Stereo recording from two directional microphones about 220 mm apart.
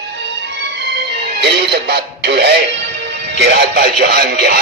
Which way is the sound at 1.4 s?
50° right (ahead or behind).